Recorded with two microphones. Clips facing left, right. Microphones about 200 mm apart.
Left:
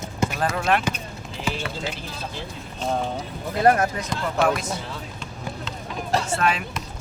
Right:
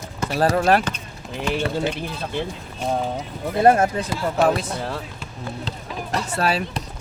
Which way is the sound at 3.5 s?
25° right (ahead or behind).